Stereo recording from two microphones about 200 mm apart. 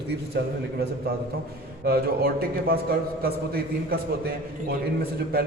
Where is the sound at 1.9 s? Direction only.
50° right (ahead or behind).